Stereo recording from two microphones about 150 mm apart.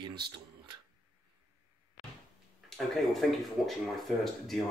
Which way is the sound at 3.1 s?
Centre (ahead or behind).